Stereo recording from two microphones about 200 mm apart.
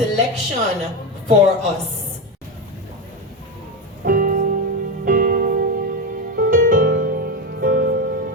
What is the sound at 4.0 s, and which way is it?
Music, 45° right (ahead or behind).